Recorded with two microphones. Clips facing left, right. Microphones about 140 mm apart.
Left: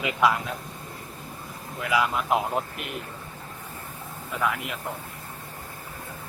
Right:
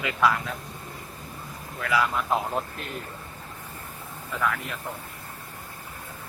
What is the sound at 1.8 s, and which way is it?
Speech, 15° left (ahead or behind).